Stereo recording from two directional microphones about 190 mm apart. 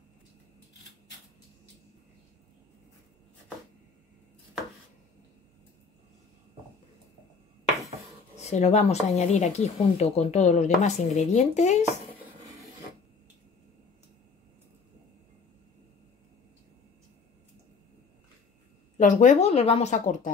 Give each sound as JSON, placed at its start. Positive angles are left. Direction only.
{"t": 8.4, "sound": "speech", "side_deg": 35}
{"t": 18.9, "sound": "speech", "side_deg": 40}